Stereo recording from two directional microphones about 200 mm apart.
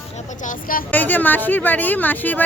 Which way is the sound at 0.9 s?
10° left (ahead or behind).